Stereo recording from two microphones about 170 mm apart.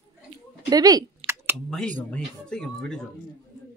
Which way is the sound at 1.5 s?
5° left (ahead or behind).